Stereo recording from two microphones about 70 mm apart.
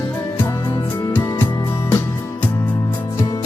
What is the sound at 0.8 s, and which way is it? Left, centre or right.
Music, left.